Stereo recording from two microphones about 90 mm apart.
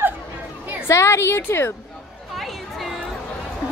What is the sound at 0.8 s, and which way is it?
Speech, 30° left (ahead or behind).